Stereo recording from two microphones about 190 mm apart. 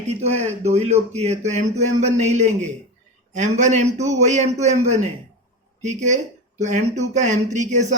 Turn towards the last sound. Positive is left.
turn(degrees=-40)  # may be behind; listen again after turning